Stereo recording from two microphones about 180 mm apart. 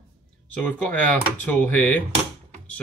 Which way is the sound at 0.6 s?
10° left (ahead or behind).